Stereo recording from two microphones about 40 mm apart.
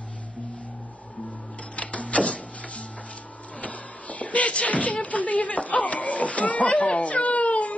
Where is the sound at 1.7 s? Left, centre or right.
Left.